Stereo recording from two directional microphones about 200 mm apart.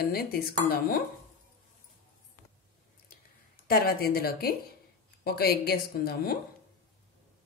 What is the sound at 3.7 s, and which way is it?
A woman's voice, 50° left (ahead or behind).